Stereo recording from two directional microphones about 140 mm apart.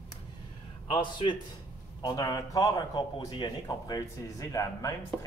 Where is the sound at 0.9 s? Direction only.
35° left (ahead or behind).